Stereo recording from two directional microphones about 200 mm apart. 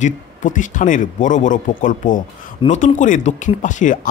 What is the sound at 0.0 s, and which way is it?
A man's voice, 40° left (ahead or behind).